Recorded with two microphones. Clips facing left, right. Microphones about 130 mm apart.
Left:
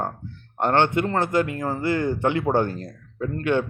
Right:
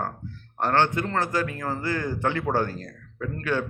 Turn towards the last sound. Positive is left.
turn(degrees=25)  # may be behind; listen again after turning